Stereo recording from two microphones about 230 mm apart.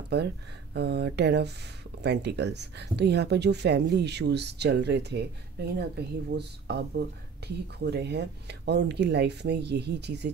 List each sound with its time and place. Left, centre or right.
0.1 s speech: right